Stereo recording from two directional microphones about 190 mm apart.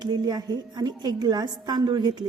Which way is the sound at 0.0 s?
20° right (ahead or behind).